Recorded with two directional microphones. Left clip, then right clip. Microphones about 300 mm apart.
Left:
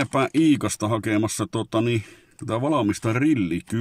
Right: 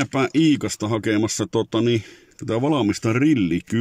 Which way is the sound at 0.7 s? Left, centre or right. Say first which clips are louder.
Right 2 dB; left.